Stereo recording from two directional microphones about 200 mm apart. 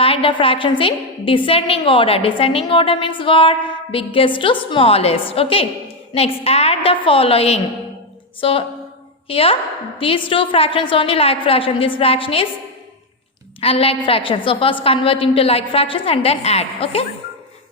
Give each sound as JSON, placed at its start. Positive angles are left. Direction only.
{"t": 0.0, "sound": "a woman's voice", "side_deg": 25}
{"t": 13.6, "sound": "a woman's voice", "side_deg": 30}